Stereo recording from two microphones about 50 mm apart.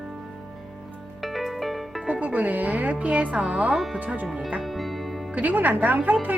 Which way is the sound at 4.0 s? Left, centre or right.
Right.